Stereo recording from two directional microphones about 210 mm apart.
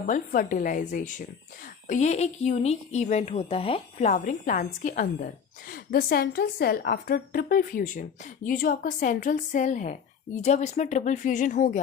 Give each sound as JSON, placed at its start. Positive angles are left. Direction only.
{"t": 0.1, "sound": "a woman's voice", "side_deg": 40}